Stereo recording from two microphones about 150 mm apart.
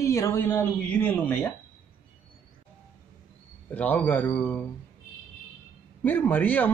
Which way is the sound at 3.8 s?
10° left (ahead or behind).